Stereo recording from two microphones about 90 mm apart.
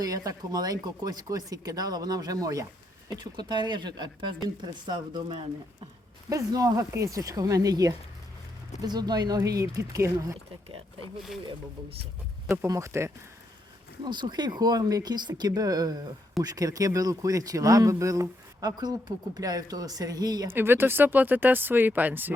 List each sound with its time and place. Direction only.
0.0 s a man's voice: 45° right (ahead or behind)
3.1 s speech: 55° right (ahead or behind)
6.3 s a man's voice: 40° right (ahead or behind)
12.5 s speech: 35° right (ahead or behind)
14.0 s a man's voice: 55° right (ahead or behind)
20.5 s speech: 25° right (ahead or behind)